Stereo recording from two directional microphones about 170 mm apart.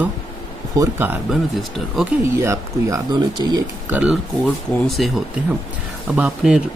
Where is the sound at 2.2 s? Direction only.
15° right (ahead or behind).